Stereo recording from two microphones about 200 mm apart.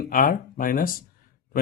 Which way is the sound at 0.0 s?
45° left (ahead or behind).